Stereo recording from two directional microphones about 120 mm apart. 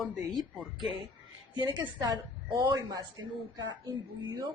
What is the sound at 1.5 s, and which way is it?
A woman's voice, 35° right (ahead or behind).